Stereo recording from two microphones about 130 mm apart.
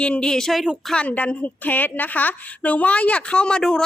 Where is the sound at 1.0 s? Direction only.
10° left (ahead or behind).